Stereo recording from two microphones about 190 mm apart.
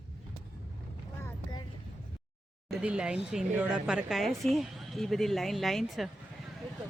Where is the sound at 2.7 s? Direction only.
5° right (ahead or behind).